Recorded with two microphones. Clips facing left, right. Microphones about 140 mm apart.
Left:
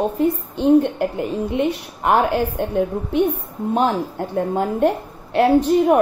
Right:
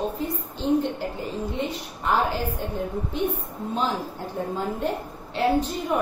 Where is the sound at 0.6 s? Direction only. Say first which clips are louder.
Left 8 dB; 65° left (ahead or behind).